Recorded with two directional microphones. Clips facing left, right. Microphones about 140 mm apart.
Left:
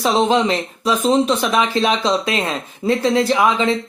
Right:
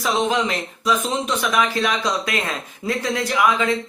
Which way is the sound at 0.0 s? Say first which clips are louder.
Left 5 dB; 30° left (ahead or behind).